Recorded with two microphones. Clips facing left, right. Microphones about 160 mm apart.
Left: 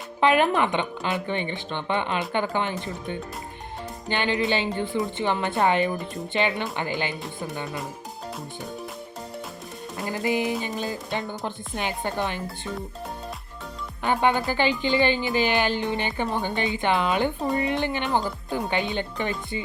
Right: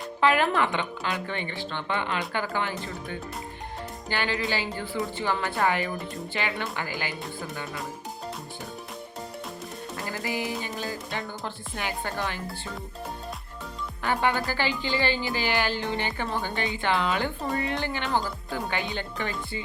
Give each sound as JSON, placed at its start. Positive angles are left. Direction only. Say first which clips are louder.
{"t": 0.2, "sound": "speech", "louder": "left 3 dB", "side_deg": 20}
{"t": 10.0, "sound": "music", "louder": "left 6 dB", "side_deg": 20}
{"t": 10.6, "sound": "speech", "louder": "left 3 dB", "side_deg": 20}
{"t": 14.0, "sound": "speech", "louder": "left 4 dB", "side_deg": 20}